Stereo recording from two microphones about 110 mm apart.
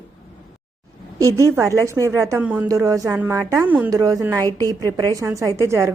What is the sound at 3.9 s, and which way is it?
A woman's voice, 30° right (ahead or behind).